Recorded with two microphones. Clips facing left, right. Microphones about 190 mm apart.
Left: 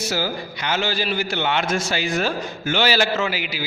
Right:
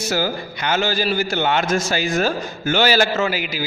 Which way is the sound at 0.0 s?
50° right (ahead or behind).